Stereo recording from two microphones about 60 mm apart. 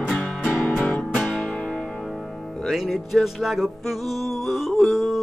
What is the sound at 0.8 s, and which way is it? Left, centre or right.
Music, left.